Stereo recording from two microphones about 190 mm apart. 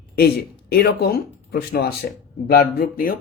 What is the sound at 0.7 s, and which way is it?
Speech, 55° left (ahead or behind).